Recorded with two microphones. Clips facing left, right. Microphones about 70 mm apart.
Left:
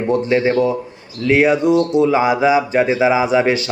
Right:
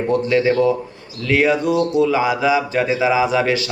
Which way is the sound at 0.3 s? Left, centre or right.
Left.